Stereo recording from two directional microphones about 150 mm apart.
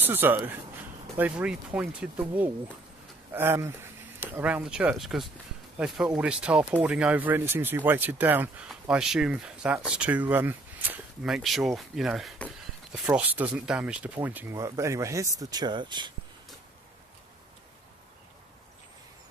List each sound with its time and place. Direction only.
0.0 s speech: 15° right (ahead or behind); by 16.1 s 30° right (ahead or behind)